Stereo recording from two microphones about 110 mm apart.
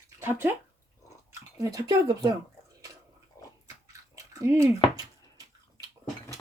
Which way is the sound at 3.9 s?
30° right (ahead or behind).